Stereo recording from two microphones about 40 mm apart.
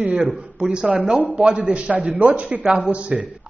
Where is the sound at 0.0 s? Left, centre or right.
Right.